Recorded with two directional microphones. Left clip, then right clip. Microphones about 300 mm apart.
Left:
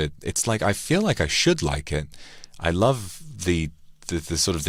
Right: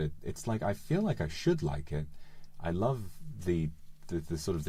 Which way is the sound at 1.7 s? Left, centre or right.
Left.